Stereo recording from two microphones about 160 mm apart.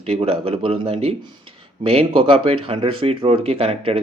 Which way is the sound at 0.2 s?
35° right (ahead or behind).